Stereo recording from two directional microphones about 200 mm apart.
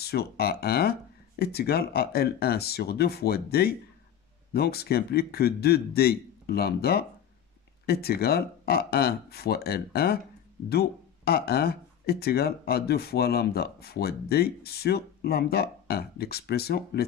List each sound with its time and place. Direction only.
0.0 s speech: 55° left (ahead or behind)